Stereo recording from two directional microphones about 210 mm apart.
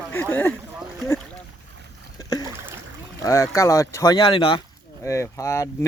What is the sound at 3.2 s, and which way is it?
Speech, 15° left (ahead or behind).